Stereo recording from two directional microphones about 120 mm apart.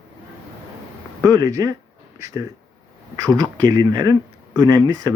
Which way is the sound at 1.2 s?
30° right (ahead or behind).